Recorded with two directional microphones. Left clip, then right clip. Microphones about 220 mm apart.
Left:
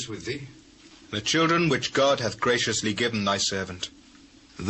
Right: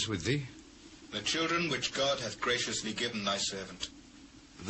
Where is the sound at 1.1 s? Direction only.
25° left (ahead or behind).